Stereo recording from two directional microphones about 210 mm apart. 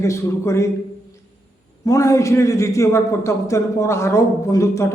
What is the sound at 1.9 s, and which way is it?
A man's voice, 15° left (ahead or behind).